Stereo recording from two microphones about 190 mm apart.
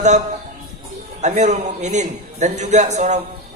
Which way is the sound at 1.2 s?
40° right (ahead or behind).